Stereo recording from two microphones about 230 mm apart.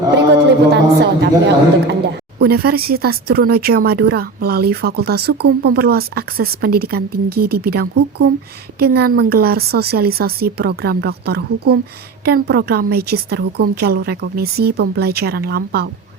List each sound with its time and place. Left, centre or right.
0.7 s a woman's voice: right